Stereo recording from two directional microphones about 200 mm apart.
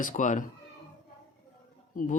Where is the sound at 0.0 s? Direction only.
40° left (ahead or behind).